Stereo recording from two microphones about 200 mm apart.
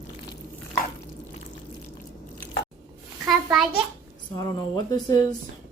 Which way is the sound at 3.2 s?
Centre (ahead or behind).